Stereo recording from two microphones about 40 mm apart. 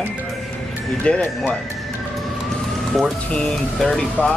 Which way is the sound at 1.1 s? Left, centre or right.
Left.